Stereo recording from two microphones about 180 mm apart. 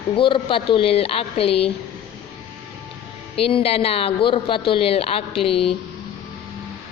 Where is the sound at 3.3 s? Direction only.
30° left (ahead or behind).